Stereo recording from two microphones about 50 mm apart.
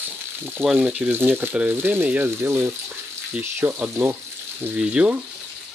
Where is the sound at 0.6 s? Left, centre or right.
Right.